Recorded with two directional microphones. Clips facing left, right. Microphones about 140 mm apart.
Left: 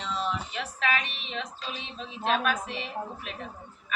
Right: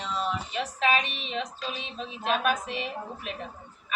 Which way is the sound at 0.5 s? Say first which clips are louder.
Right 4 dB; 20° right (ahead or behind).